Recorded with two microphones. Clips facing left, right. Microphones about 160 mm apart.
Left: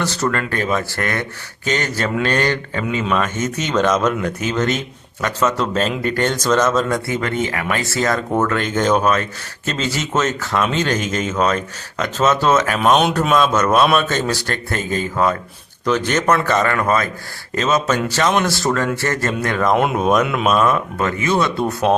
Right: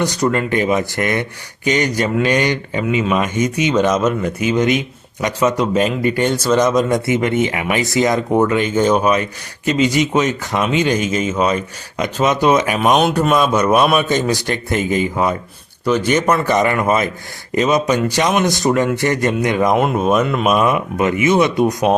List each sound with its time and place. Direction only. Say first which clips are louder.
0.0 s speech: right 4 dB; 15° right (ahead or behind)
19.7 s speech: right 1 dB; centre (ahead or behind)